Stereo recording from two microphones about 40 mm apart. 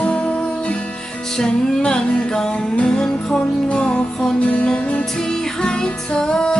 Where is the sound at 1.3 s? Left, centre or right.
Centre.